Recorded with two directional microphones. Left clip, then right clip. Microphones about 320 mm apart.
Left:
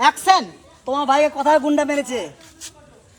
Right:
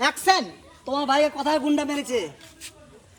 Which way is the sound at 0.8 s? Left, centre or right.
Centre.